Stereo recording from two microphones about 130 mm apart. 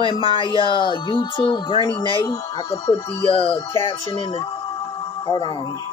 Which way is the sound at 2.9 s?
40° left (ahead or behind).